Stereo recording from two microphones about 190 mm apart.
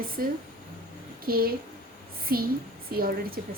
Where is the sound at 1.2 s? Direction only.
50° right (ahead or behind).